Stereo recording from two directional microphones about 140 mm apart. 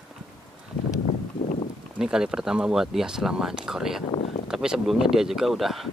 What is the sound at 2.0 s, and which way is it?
Speech, 5° right (ahead or behind).